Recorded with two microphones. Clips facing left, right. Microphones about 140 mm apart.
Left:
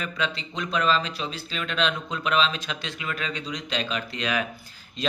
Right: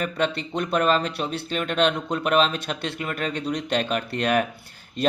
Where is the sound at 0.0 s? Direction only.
55° right (ahead or behind).